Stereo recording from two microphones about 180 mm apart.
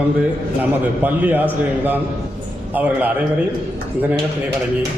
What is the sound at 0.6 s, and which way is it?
Speech, 10° right (ahead or behind).